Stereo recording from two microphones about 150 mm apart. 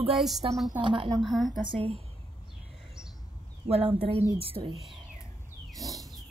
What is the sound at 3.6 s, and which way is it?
A woman's voice, 40° right (ahead or behind).